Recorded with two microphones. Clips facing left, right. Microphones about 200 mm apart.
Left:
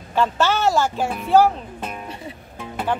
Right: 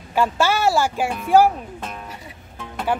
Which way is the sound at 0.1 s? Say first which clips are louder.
Even; 10° right (ahead or behind).